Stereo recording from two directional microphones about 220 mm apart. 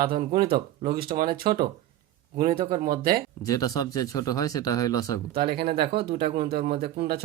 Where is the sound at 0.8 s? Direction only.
40° right (ahead or behind).